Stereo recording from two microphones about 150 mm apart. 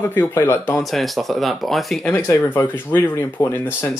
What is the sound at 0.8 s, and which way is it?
Speech, centre (ahead or behind).